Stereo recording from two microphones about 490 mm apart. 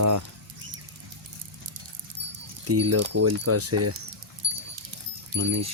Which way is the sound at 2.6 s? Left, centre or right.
Right.